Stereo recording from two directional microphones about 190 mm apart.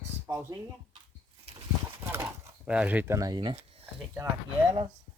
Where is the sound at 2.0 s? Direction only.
15° right (ahead or behind).